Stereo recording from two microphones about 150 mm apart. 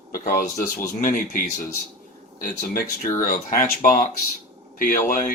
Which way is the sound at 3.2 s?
70° left (ahead or behind).